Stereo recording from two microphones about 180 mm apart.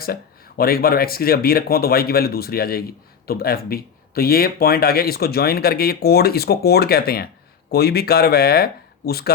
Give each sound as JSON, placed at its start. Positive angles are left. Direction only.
{"t": 0.0, "sound": "speech", "side_deg": 55}